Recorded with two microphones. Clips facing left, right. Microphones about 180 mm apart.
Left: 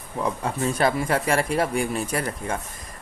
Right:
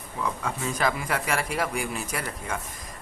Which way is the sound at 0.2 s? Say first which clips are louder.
Left 5 dB; 30° left (ahead or behind).